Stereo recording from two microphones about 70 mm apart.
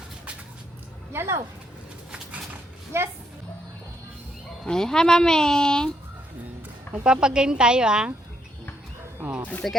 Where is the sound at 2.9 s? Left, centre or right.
Right.